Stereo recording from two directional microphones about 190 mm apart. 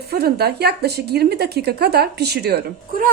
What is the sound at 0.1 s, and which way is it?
Speech, 55° right (ahead or behind).